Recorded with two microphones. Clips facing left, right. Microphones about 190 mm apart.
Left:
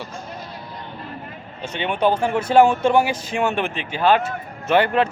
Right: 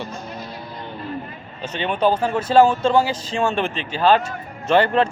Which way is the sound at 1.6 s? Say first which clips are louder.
Even; 10° left (ahead or behind).